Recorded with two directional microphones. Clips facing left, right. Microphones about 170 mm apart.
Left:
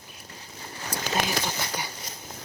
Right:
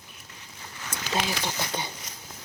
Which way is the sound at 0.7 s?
35° left (ahead or behind).